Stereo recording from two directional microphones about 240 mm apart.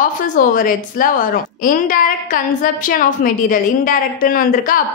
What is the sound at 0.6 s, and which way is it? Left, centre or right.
A woman's voice, left.